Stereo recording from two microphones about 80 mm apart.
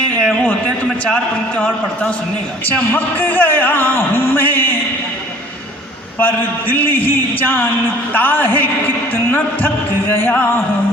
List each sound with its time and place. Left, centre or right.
1.0 s a man's voice: centre
6.1 s speech: left